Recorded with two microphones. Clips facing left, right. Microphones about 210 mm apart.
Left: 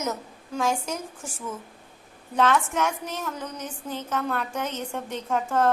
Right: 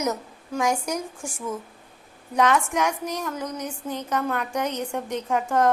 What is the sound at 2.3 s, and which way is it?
A woman's voice, 15° right (ahead or behind).